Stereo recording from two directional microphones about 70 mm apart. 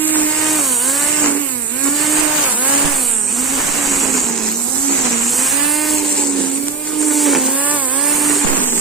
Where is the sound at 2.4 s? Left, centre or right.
Right.